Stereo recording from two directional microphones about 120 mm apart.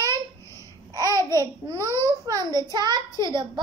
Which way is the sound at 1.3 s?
30° right (ahead or behind).